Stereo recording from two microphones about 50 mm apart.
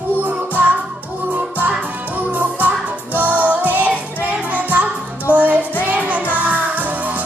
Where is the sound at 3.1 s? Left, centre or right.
Right.